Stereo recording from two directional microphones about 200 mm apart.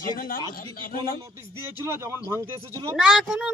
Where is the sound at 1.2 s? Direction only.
15° right (ahead or behind).